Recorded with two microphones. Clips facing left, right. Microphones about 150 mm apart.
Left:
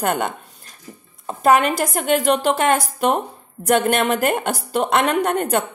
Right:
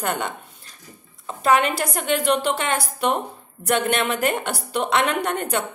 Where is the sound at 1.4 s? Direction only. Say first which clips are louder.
Left 3 dB; 45° left (ahead or behind).